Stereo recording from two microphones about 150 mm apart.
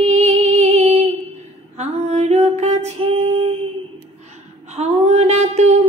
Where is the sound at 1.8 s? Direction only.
45° right (ahead or behind).